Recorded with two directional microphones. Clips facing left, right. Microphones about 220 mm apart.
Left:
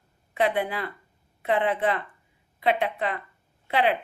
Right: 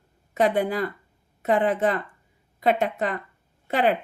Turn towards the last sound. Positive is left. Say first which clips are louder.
# right 2 dB
turn(degrees=-45)  # may be behind; listen again after turning